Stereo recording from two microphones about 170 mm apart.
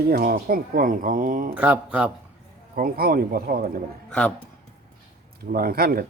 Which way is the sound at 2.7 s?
60° right (ahead or behind).